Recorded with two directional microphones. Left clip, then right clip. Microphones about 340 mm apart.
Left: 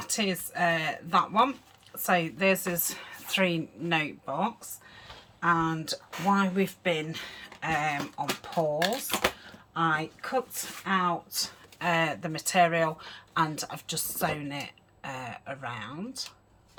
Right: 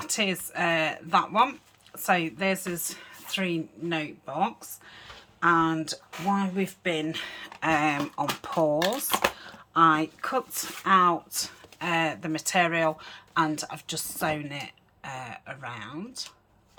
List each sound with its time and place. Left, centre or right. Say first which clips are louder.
0.1 s speech: right 2 dB; centre